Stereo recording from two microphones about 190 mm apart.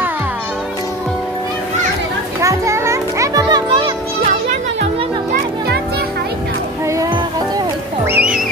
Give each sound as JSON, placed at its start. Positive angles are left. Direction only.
{"t": 2.4, "sound": "children playing", "side_deg": -15}
{"t": 8.1, "sound": "music", "side_deg": -5}